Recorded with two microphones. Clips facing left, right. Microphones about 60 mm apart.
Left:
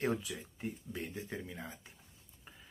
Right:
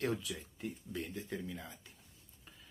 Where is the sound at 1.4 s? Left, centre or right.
Left.